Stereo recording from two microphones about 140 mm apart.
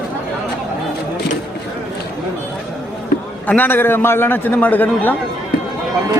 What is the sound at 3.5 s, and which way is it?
A man's voice, 15° left (ahead or behind).